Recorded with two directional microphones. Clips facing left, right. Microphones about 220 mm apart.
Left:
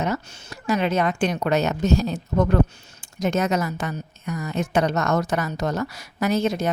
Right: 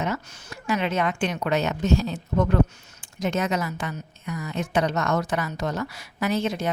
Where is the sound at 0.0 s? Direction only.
40° left (ahead or behind).